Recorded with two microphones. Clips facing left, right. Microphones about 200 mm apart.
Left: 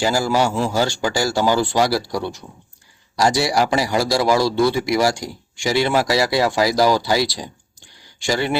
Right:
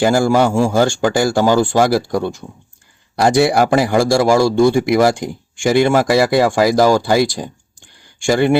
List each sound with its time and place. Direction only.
0.0 s a man's voice: 55° right (ahead or behind)